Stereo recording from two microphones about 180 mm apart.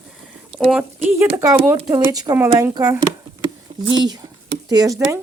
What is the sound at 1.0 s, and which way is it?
Speech, 15° right (ahead or behind).